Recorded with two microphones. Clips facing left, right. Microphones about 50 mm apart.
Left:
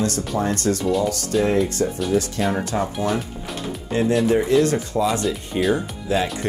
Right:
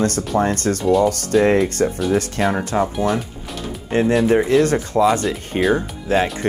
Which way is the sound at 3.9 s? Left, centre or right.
Right.